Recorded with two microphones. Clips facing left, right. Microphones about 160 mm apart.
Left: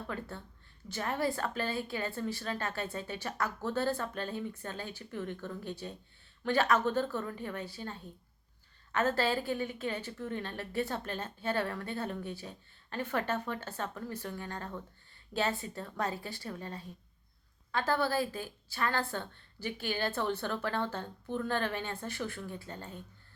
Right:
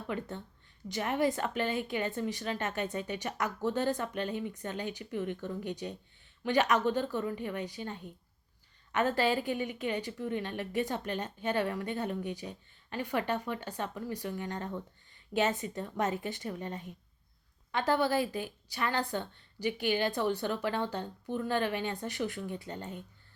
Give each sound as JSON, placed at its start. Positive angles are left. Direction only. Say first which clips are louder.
{"t": 0.1, "sound": "a woman's voice", "louder": "right 3 dB", "side_deg": -20}